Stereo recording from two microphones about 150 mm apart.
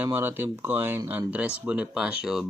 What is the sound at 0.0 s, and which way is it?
Speech, 15° right (ahead or behind).